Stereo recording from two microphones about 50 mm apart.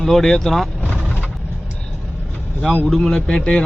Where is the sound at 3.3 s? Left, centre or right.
Centre.